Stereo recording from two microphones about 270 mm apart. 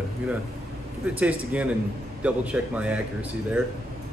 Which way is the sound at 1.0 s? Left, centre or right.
Centre.